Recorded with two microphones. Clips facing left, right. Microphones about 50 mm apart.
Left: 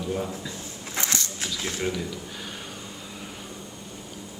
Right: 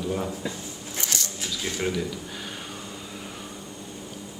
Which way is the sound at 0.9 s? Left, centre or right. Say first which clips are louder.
Left 3 dB; left.